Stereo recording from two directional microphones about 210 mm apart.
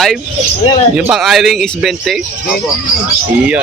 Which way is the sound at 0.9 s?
5° right (ahead or behind).